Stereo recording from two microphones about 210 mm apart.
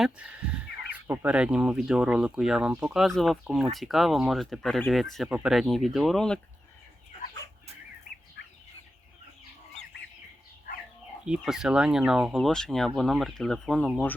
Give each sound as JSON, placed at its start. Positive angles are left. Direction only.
{"t": 1.0, "sound": "speech", "side_deg": -10}
{"t": 8.4, "sound": "chicken", "side_deg": 55}
{"t": 11.3, "sound": "speech", "side_deg": -5}